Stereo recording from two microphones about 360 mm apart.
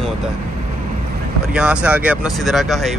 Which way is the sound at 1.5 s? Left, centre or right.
Centre.